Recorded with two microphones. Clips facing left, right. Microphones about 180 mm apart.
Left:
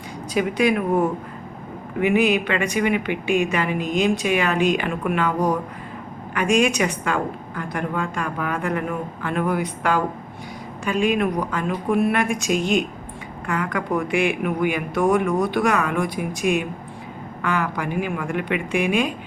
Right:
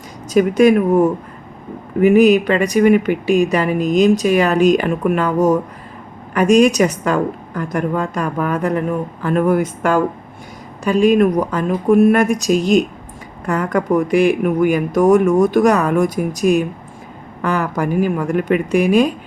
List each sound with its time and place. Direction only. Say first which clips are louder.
0.3 s speech: right 8 dB; 45° right (ahead or behind)